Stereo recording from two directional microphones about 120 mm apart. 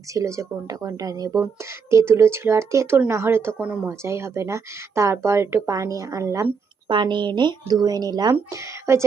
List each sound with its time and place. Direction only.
0.1 s speech: 25° right (ahead or behind); by 3.8 s 10° right (ahead or behind)
3.8 s speech: 25° right (ahead or behind)
6.8 s speech: 40° right (ahead or behind)
8.3 s speech: 25° right (ahead or behind)